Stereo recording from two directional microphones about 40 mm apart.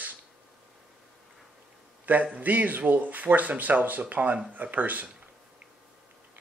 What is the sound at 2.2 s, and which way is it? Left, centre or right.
Speech, right.